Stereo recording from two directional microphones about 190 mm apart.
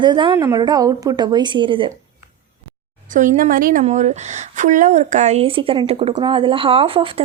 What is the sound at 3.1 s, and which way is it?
A woman's voice, 40° right (ahead or behind).